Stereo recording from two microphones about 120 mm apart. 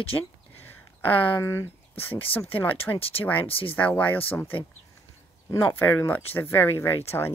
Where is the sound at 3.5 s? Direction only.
50° left (ahead or behind).